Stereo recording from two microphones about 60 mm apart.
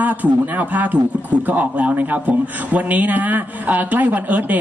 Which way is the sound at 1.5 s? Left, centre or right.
Right.